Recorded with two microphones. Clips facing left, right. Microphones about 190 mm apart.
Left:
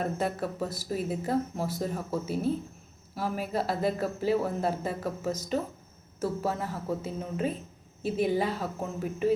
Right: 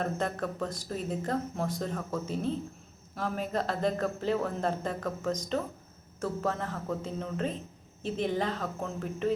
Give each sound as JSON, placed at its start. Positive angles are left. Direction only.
{"t": 0.0, "sound": "speech", "side_deg": 10}